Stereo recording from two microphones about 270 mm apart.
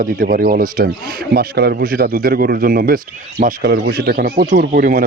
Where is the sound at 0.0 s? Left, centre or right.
Right.